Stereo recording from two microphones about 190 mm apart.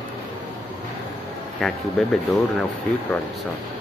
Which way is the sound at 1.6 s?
5° left (ahead or behind).